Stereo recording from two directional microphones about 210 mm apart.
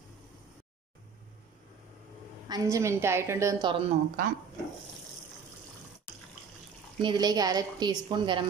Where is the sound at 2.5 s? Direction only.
15° right (ahead or behind).